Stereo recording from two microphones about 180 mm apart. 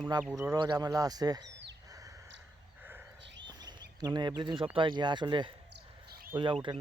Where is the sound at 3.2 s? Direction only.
80° right.